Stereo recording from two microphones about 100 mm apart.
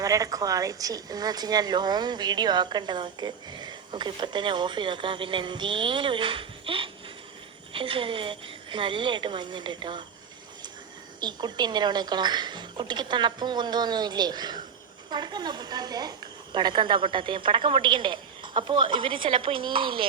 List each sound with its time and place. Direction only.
0.0 s a woman's voice: 35° right (ahead or behind); by 10.0 s 50° right (ahead or behind)
11.2 s speech: 45° right (ahead or behind)